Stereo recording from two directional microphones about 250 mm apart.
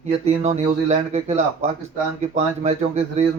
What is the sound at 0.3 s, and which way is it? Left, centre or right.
Speech, right.